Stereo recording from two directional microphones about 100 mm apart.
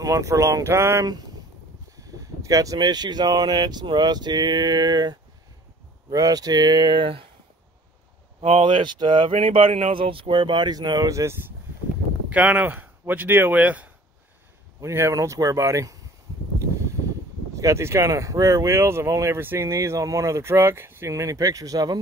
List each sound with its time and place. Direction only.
0.0 s speech: 35° right (ahead or behind); by 7.2 s 60° right (ahead or behind)
8.4 s speech: 90° right
8.6 s speech: 50° right (ahead or behind)
9.3 s speech: 65° right (ahead or behind); by 11.3 s 30° right (ahead or behind)
12.3 s speech: 15° right (ahead or behind)
14.8 s speech: 25° right (ahead or behind)
17.6 s speech: 30° right (ahead or behind)